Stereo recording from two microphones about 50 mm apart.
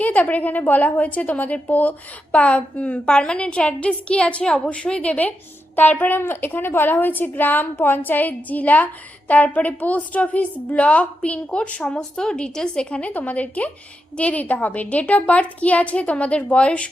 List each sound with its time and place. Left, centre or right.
0.0 s a woman's voice: left
5.7 s a woman's voice: left